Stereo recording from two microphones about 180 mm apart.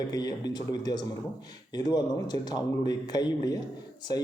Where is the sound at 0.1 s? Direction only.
20° left (ahead or behind).